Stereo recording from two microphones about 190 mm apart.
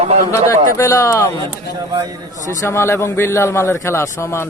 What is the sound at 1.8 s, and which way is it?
Speech, 20° right (ahead or behind).